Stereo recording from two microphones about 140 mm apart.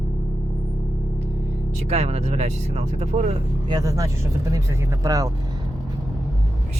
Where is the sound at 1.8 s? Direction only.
50° right (ahead or behind).